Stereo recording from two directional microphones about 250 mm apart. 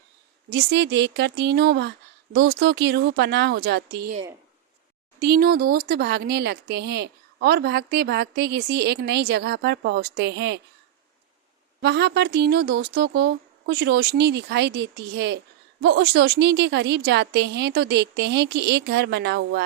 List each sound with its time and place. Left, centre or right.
0.5 s a woman's voice: right
5.2 s speech: right
11.8 s a woman's voice: right